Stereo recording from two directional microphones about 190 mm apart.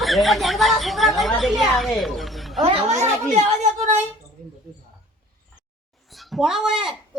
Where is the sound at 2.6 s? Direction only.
35° right (ahead or behind).